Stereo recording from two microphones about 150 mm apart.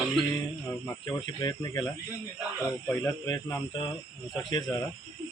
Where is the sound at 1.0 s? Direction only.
25° left (ahead or behind).